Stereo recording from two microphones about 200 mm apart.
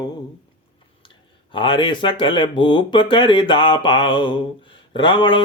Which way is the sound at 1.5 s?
25° left (ahead or behind).